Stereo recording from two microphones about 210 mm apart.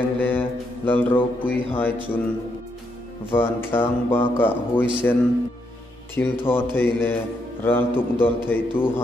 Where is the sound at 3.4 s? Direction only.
10° left (ahead or behind).